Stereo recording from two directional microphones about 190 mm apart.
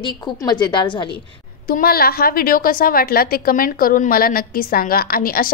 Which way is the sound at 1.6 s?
50° left (ahead or behind).